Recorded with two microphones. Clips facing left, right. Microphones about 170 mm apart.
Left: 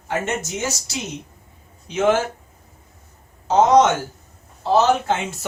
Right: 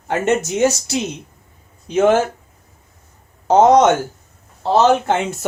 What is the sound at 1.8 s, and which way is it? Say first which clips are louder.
Speech: right 4 dB; 45° right (ahead or behind).